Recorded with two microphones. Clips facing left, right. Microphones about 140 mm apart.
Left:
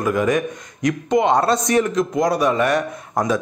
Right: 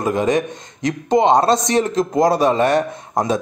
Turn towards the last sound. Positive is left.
turn(degrees=-30)  # may be behind; listen again after turning